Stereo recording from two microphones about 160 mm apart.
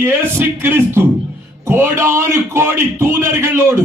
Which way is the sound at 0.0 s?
15° right (ahead or behind).